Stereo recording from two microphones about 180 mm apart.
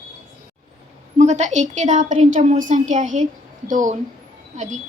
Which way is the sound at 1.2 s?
40° right (ahead or behind).